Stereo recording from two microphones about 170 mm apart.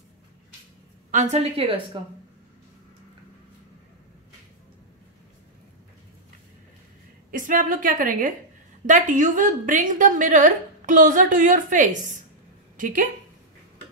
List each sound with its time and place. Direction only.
1.1 s a woman's voice: 40° right (ahead or behind)
7.2 s a woman's voice: 50° right (ahead or behind)